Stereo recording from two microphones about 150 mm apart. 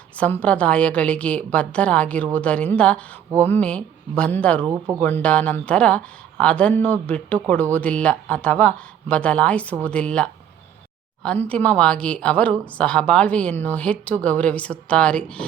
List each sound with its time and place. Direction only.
0.2 s speech: 10° left (ahead or behind)
4.6 s speech: 20° right (ahead or behind)
4.9 s speech: 10° left (ahead or behind)